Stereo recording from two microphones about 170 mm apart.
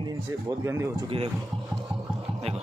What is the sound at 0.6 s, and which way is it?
Speech, 15° right (ahead or behind).